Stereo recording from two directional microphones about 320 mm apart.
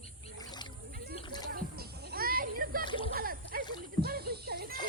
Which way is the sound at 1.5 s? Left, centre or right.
Right.